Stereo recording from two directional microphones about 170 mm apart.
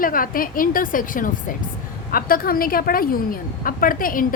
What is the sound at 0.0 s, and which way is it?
A woman's voice, 55° left (ahead or behind).